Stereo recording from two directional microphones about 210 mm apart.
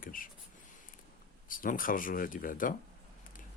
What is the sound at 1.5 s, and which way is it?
Speech, 40° left (ahead or behind).